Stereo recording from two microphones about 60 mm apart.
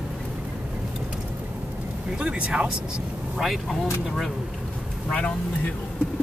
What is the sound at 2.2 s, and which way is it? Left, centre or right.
Speech, centre.